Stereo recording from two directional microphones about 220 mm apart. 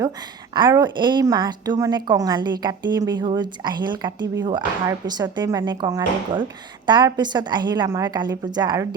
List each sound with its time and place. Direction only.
0.0 s a woman's voice: 20° right (ahead or behind)